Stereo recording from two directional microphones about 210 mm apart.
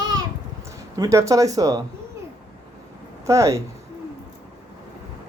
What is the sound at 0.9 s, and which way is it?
Speech, 15° right (ahead or behind).